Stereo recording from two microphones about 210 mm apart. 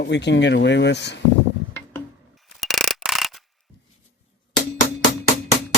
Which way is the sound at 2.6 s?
Centre (ahead or behind).